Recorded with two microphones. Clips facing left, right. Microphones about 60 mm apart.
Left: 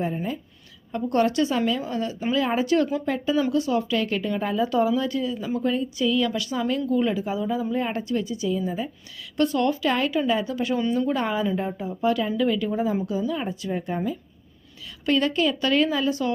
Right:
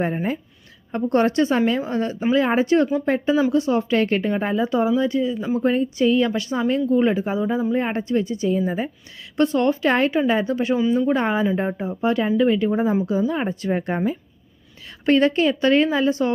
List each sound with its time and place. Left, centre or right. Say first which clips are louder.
0.0 s speech: right 4 dB; right
0.9 s a woman's voice: right 3 dB; right
5.6 s a woman's voice: right 5 dB; right
9.4 s a woman's voice: right 3 dB; right